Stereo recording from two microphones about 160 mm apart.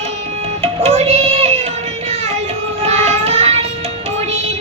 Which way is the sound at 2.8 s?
40° right (ahead or behind).